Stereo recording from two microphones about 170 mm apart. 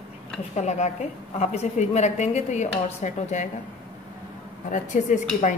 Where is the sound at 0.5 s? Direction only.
40° left (ahead or behind).